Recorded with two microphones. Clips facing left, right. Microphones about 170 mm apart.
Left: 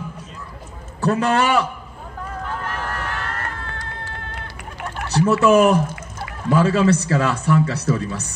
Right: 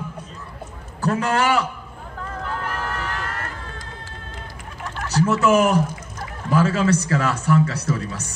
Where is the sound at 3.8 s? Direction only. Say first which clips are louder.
Left 4 dB; 65° left (ahead or behind).